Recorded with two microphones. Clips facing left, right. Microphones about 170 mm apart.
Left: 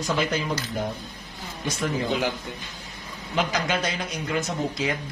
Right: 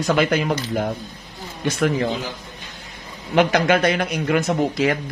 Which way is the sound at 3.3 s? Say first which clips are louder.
Right 9 dB; 65° right (ahead or behind).